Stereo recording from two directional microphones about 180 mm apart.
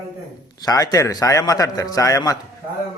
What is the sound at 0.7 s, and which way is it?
A man's voice, 20° left (ahead or behind).